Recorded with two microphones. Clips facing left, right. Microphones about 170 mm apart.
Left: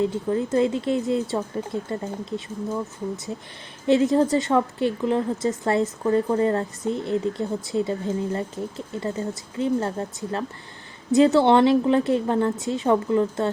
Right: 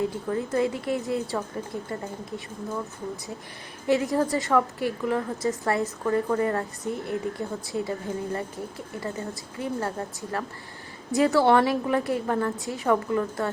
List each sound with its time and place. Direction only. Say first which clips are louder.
0.0 s a woman's voice: left 4 dB; 25° left (ahead or behind)
3.8 s a woman's voice: left 5 dB; 25° left (ahead or behind)